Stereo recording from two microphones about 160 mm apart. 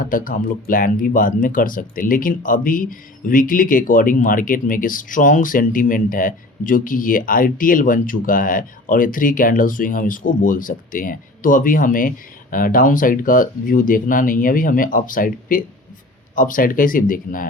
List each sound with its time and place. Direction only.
0.0 s speech: 60° left (ahead or behind)